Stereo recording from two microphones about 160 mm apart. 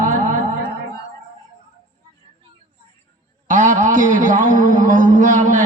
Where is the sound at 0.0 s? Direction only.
55° right (ahead or behind).